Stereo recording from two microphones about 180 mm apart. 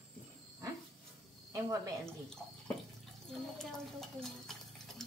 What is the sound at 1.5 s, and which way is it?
Speech, 20° right (ahead or behind).